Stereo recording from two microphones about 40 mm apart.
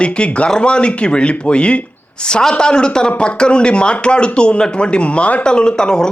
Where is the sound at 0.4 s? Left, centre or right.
Left.